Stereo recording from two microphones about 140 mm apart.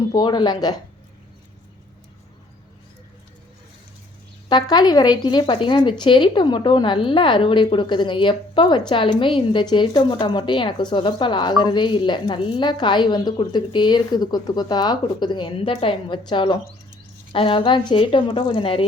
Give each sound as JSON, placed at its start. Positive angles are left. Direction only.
{"t": 0.1, "sound": "speech", "side_deg": 35}
{"t": 4.4, "sound": "speech", "side_deg": 30}